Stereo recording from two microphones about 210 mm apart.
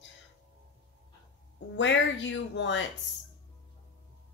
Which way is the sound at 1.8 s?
60° left (ahead or behind).